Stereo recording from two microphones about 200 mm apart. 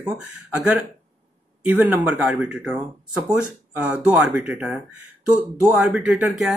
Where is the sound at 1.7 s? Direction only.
5° right (ahead or behind).